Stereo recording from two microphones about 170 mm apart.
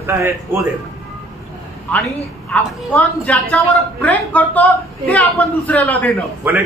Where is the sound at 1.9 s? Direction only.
10° left (ahead or behind).